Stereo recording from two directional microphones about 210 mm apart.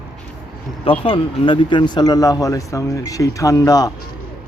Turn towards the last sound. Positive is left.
turn(degrees=15)  # may be behind; listen again after turning